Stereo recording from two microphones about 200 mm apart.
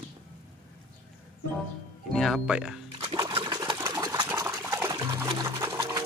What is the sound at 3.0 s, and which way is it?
Sewing machine, 20° right (ahead or behind).